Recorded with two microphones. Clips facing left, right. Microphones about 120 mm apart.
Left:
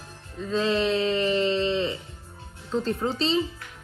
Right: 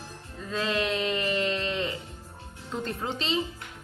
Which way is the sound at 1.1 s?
30° left (ahead or behind).